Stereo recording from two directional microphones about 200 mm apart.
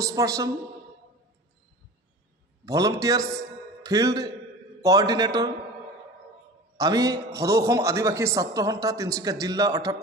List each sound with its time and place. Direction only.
0.0 s a man's voice: 15° right (ahead or behind)
2.6 s a man's voice: 15° right (ahead or behind)
6.8 s a man's voice: 20° right (ahead or behind)